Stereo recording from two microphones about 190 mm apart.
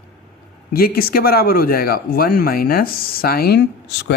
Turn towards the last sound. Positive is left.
turn(degrees=60)  # may be behind; listen again after turning